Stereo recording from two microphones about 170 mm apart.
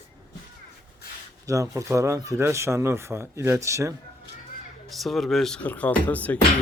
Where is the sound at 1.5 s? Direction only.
20° right (ahead or behind).